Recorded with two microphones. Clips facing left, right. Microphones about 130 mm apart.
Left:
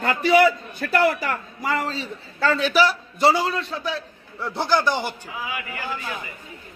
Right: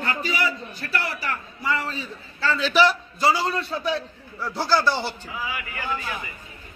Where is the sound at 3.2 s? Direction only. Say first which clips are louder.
Left 4 dB; 25° left (ahead or behind).